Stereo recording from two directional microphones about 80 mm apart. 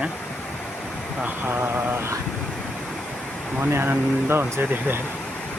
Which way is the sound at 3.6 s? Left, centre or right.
Right.